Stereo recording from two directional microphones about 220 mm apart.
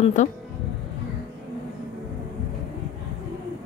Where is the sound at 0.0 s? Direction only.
35° left (ahead or behind).